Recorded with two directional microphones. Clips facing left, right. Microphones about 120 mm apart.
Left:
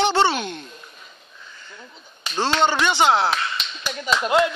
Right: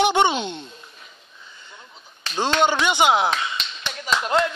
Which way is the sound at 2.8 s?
15° right (ahead or behind).